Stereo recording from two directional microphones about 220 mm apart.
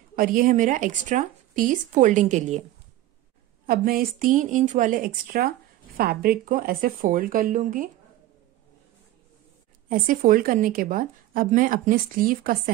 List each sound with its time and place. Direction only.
0.1 s a woman's voice: 40° right (ahead or behind)
3.6 s a woman's voice: 40° right (ahead or behind)
9.8 s a woman's voice: 40° right (ahead or behind)